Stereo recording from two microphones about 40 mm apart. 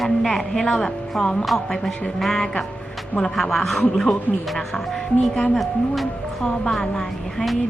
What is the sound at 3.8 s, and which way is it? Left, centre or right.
Speech, centre.